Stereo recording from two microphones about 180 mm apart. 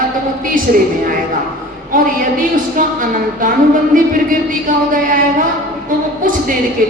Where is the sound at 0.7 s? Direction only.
50° right (ahead or behind).